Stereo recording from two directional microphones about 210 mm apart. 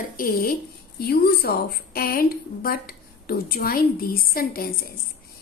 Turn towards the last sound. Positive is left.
turn(degrees=45)  # may be behind; listen again after turning